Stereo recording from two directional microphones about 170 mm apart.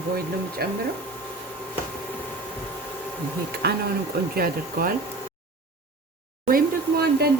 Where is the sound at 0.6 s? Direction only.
65° right (ahead or behind).